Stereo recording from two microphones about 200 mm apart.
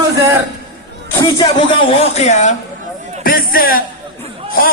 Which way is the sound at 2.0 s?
35° left (ahead or behind).